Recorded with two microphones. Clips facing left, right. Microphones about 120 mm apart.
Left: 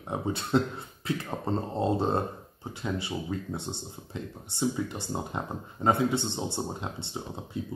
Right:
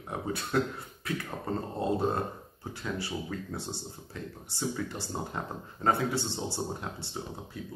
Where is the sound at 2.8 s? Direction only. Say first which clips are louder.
Left 3 dB; 20° left (ahead or behind).